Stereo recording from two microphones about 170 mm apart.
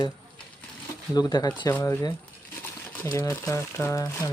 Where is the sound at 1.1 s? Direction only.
25° left (ahead or behind).